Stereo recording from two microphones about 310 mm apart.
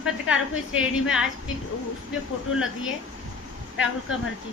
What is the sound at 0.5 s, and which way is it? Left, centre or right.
Speech, left.